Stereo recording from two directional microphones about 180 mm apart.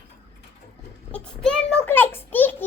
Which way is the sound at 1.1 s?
5° left (ahead or behind).